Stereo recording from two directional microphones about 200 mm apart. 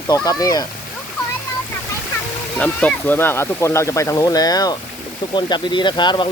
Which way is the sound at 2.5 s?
5° left (ahead or behind).